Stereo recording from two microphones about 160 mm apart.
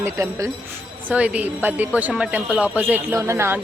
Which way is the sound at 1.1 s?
10° right (ahead or behind).